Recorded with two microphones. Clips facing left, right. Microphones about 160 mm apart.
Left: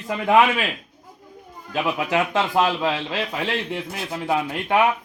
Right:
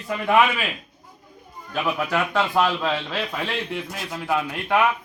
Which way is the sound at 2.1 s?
20° left (ahead or behind).